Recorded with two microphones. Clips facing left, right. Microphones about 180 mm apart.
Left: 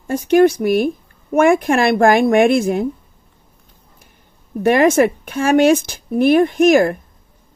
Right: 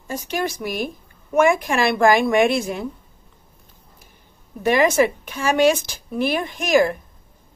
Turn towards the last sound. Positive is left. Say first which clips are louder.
# left 6 dB
turn(degrees=55)  # may be behind; listen again after turning